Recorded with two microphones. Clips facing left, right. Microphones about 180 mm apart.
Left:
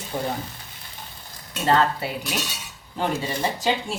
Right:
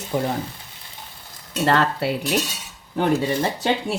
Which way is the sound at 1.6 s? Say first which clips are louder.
Right 1 dB; 65° right (ahead or behind).